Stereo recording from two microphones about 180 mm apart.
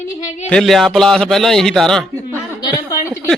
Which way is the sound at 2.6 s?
20° left (ahead or behind).